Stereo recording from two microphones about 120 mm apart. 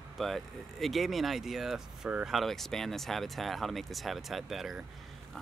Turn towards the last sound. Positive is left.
turn(degrees=0)  # may be behind; listen again after turning